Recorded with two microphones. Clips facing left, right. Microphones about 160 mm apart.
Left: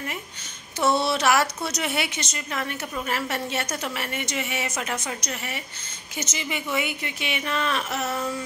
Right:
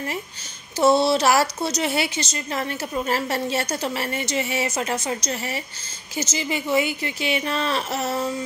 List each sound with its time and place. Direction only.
0.7 s speech: 35° right (ahead or behind)